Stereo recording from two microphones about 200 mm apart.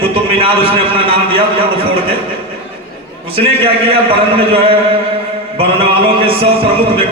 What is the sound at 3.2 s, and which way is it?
A man's voice, 25° right (ahead or behind).